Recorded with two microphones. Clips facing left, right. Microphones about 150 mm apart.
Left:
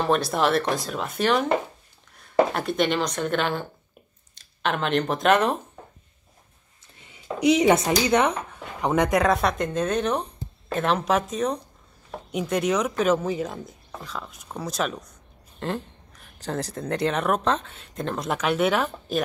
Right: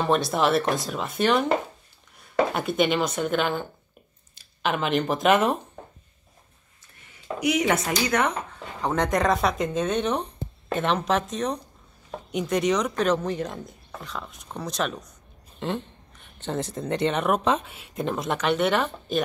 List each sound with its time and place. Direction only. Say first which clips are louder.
0.0 s speech: even; centre (ahead or behind)
2.5 s speech: right 1 dB; 5° right (ahead or behind)
7.0 s a sound: left 3 dB; 20° left (ahead or behind)
7.9 s speech: left 4 dB; 25° left (ahead or behind)
8.8 s speech: left 2 dB; 10° left (ahead or behind)
15.6 s a sound: even; centre (ahead or behind)
16.7 s speech: even; centre (ahead or behind)